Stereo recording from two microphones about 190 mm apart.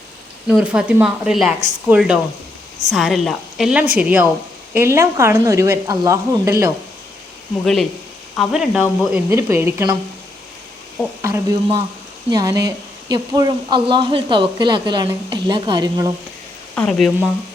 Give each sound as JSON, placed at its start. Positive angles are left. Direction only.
{"t": 0.4, "sound": "speech", "side_deg": -5}
{"t": 7.6, "sound": "speech", "side_deg": 0}
{"t": 11.2, "sound": "speech", "side_deg": -15}
{"t": 16.7, "sound": "speech", "side_deg": 5}